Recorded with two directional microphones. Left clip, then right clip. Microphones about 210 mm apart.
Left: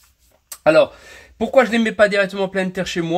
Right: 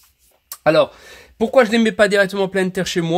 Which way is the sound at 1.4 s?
35° right (ahead or behind).